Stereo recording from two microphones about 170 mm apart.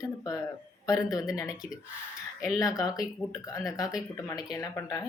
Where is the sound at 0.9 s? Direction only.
20° left (ahead or behind).